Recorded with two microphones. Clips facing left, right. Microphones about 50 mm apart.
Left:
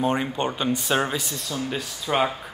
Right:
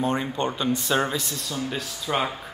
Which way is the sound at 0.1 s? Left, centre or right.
Centre.